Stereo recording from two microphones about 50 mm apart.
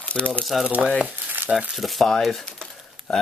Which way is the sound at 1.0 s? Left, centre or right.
Right.